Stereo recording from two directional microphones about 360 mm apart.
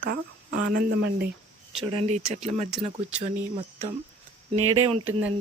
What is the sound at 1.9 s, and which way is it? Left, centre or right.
A woman's voice, centre.